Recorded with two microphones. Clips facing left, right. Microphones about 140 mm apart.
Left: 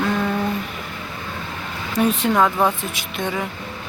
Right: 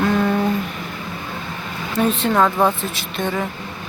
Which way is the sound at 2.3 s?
Centre (ahead or behind).